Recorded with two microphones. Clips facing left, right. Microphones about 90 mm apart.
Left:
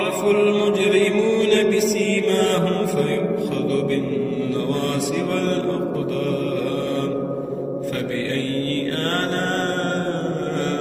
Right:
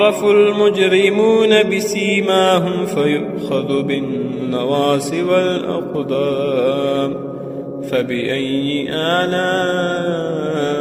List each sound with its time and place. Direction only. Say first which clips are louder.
0.0 s mantra: right 7 dB; 65° right (ahead or behind)